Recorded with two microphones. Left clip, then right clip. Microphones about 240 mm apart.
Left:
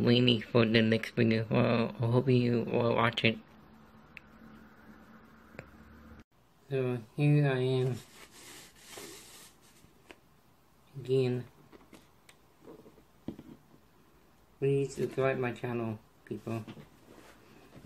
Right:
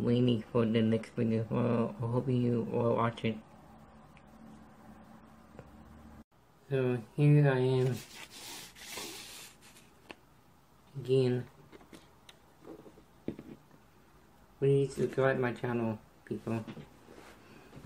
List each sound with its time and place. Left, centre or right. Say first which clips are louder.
0.0 s speech: left 4 dB; centre
6.7 s speech: right 1 dB; centre
11.1 s speech: right 1 dB; centre
14.6 s speech: right 2 dB; centre